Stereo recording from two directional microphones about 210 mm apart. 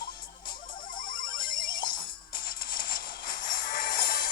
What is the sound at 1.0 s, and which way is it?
Music, 40° left (ahead or behind).